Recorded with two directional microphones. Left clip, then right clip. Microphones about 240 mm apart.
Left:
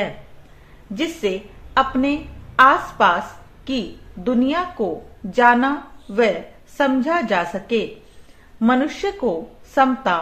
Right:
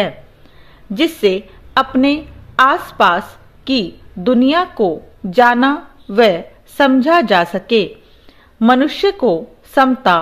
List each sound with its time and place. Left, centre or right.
0.9 s a woman's voice: right